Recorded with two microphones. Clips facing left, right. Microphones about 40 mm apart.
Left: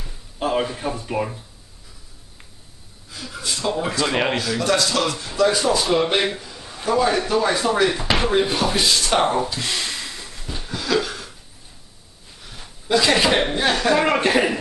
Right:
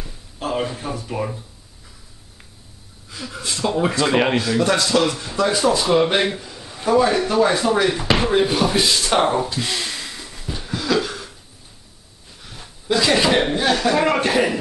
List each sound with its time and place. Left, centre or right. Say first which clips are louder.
0.4 s speech: left 2 dB; left
1.1 s a man's voice: even; centre
3.3 s a man's voice: right 1 dB; centre
4.4 s a man's voice: right 2 dB; centre
7.6 s a man's voice: right 1 dB; centre
9.6 s a sound: right 1 dB; centre
12.4 s a sound: right 1 dB; centre
13.7 s a man's voice: left 1 dB; centre